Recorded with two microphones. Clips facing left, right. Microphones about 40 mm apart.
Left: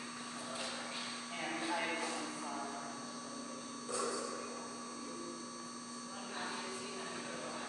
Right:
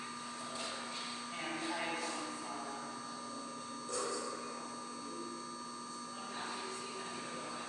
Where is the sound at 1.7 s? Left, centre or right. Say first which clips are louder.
Left 3 dB; centre.